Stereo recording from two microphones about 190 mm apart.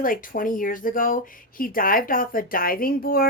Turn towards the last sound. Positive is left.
turn(degrees=50)  # may be behind; listen again after turning